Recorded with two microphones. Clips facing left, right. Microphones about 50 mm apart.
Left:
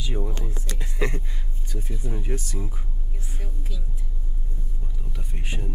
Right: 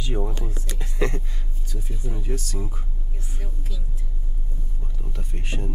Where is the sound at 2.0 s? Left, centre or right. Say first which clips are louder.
Right 1 dB; centre.